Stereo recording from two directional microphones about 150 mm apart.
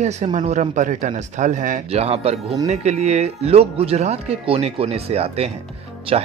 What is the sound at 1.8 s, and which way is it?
Speech, 40° right (ahead or behind).